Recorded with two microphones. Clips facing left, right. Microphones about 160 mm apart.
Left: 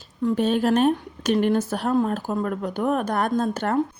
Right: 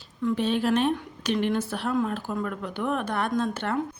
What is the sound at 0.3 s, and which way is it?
A woman's voice, 45° left (ahead or behind).